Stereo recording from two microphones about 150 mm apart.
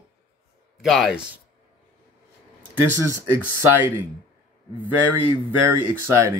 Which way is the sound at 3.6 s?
10° right (ahead or behind).